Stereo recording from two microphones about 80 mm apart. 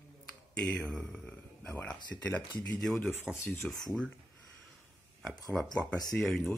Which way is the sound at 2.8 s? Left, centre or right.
Centre.